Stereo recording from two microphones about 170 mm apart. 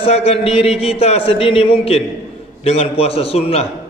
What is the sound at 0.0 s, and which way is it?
A man's voice, 35° left (ahead or behind).